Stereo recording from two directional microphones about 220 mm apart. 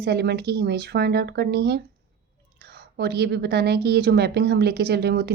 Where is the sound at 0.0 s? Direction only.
50° right (ahead or behind).